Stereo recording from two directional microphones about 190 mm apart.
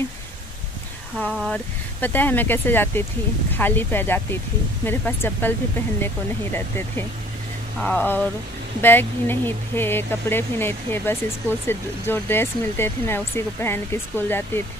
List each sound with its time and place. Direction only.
1.3 s speech: centre (ahead or behind)
2.0 s speech: 10° left (ahead or behind)